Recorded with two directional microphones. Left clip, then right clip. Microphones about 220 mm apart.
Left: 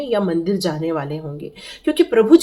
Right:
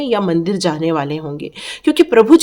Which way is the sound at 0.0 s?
45° right (ahead or behind).